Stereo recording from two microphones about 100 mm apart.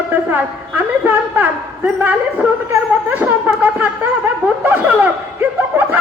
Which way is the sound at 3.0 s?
15° right (ahead or behind).